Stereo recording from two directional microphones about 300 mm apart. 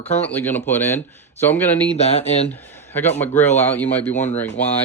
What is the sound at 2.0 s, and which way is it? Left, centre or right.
Speech, left.